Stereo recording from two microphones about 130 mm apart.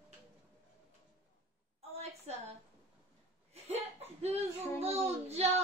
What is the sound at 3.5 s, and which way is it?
Chuckle, 55° right (ahead or behind).